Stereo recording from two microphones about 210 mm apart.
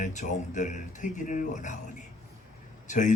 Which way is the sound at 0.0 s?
35° left (ahead or behind).